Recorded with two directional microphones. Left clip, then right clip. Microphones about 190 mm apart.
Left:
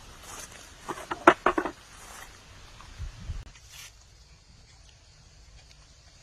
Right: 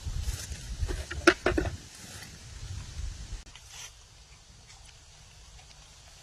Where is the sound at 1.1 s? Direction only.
25° right (ahead or behind).